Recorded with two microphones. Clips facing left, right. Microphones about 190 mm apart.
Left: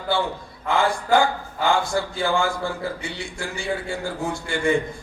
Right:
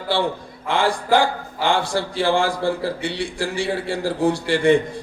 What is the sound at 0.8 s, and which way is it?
A man's voice, 30° right (ahead or behind).